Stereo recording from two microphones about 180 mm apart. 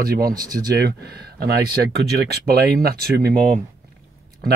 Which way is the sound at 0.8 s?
65° right (ahead or behind).